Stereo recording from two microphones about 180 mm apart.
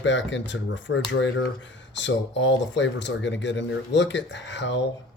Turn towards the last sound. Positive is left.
turn(degrees=80)